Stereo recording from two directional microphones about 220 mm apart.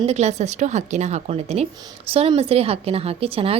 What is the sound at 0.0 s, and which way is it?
A woman's voice, 30° right (ahead or behind).